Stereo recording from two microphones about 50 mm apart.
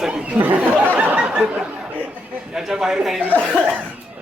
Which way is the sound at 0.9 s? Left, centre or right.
Right.